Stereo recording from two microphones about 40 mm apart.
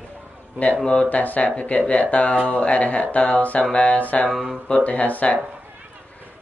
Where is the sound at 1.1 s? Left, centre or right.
Left.